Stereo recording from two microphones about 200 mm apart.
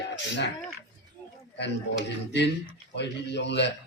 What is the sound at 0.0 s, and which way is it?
Speech, 60° left (ahead or behind).